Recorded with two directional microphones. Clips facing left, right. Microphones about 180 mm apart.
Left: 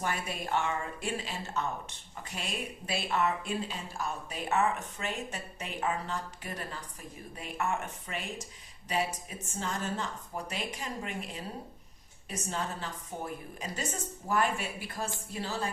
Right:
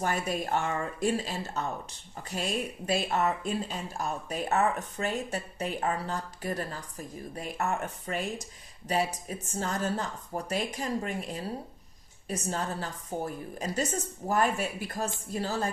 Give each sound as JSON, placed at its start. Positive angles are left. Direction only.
{"t": 0.0, "sound": "speech", "side_deg": -45}
{"t": 9.6, "sound": "speech", "side_deg": -40}